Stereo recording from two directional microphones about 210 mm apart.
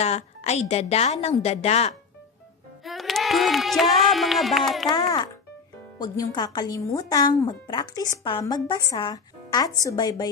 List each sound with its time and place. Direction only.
0.0 s a woman's voice: 30° left (ahead or behind)
2.8 s a sound: centre (ahead or behind)
4.8 s speech: 20° left (ahead or behind)